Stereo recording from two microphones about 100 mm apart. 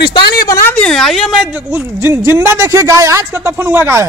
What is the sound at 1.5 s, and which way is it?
Speech, 20° right (ahead or behind).